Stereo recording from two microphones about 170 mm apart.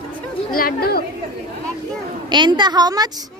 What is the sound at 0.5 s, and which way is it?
Speech, 60° left (ahead or behind).